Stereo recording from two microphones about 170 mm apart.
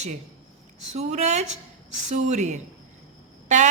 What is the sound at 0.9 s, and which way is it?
A woman's voice, 40° right (ahead or behind).